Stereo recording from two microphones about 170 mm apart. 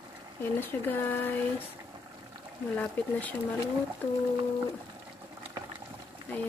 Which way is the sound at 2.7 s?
10° left (ahead or behind).